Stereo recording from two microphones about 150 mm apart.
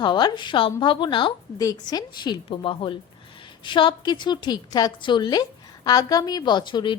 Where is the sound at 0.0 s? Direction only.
30° left (ahead or behind).